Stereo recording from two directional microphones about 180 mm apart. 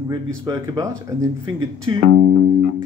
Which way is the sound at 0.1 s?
20° right (ahead or behind).